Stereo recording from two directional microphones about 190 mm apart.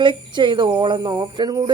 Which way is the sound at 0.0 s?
25° right (ahead or behind).